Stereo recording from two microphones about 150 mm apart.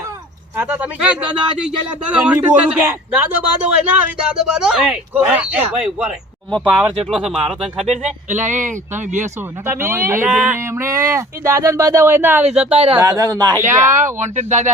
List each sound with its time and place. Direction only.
0.5 s speech: 10° right (ahead or behind)
7.9 s a man's voice: 55° right (ahead or behind)
9.6 s speech: 15° right (ahead or behind)
12.7 s speech: 40° right (ahead or behind)
13.0 s speech: 25° right (ahead or behind)
13.7 s a man's voice: 60° right (ahead or behind)